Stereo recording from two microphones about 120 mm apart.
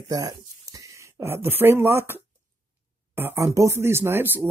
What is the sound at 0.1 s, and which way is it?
Speech, 30° right (ahead or behind).